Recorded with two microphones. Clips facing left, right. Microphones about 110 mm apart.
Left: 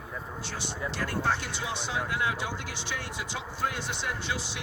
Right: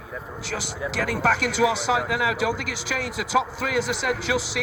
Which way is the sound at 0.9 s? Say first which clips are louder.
Right 7 dB; 90° right.